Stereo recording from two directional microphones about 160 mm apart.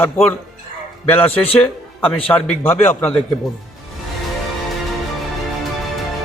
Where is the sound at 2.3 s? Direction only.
10° left (ahead or behind).